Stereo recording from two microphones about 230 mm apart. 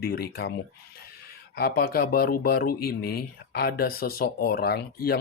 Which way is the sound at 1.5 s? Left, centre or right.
Left.